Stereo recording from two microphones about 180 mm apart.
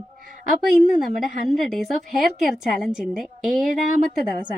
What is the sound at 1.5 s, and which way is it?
A woman's voice, centre (ahead or behind).